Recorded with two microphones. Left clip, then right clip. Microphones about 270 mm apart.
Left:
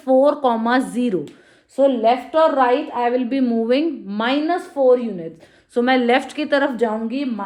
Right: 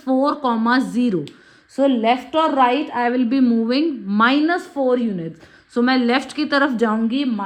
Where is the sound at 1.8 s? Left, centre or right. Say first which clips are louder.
Left 2 dB; centre.